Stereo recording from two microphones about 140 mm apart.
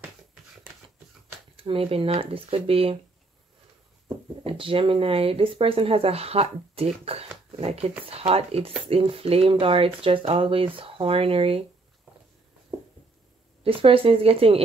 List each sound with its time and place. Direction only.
1.6 s speech: 40° right (ahead or behind)
4.5 s speech: 40° right (ahead or behind)
13.7 s speech: 40° right (ahead or behind)